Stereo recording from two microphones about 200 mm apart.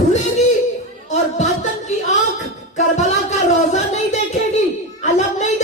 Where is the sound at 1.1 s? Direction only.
35° left (ahead or behind).